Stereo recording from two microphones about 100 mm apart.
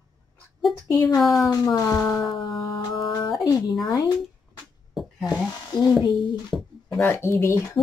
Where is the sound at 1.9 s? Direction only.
30° left (ahead or behind).